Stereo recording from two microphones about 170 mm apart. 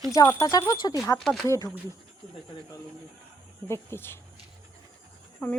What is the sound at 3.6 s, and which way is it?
Speech, 15° left (ahead or behind).